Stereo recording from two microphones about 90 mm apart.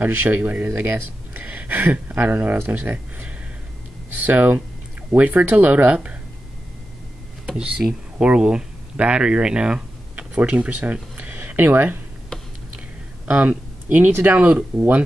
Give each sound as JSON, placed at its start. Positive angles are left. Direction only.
{"t": 0.0, "sound": "speech", "side_deg": -25}
{"t": 7.4, "sound": "speech", "side_deg": -10}
{"t": 13.3, "sound": "speech", "side_deg": -15}